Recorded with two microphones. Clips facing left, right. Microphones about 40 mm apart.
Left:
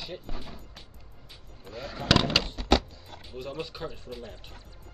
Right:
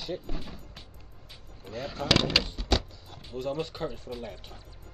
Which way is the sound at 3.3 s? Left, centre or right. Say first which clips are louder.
Right 4 dB; centre.